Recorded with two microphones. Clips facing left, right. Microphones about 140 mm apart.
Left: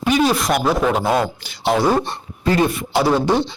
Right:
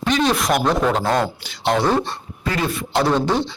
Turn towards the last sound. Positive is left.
turn(degrees=10)  # may be behind; listen again after turning